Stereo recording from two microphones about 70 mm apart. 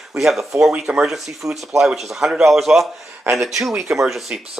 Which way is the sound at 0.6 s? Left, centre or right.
Centre.